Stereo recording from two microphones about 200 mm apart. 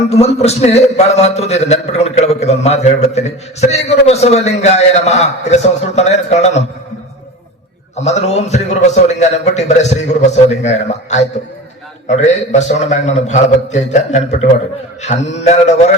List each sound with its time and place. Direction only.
0.1 s a man's voice: 30° left (ahead or behind)
7.9 s a man's voice: 35° left (ahead or behind)